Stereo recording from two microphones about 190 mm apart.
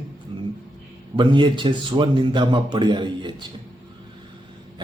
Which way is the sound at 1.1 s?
25° right (ahead or behind).